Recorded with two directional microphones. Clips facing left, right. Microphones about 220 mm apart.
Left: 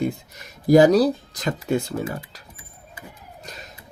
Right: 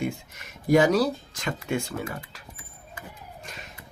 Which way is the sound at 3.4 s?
35° left (ahead or behind).